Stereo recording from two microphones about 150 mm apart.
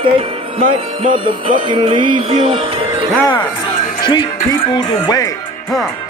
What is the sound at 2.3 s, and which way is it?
Speech, 40° right (ahead or behind).